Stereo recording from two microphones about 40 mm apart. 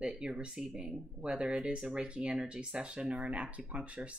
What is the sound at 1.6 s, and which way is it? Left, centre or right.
Speech, centre.